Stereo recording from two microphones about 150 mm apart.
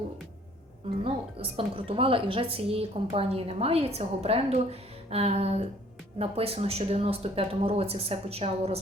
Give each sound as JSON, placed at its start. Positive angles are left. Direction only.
{"t": 1.0, "sound": "speech", "side_deg": -35}